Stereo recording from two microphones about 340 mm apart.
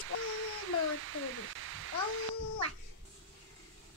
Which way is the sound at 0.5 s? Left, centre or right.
Right.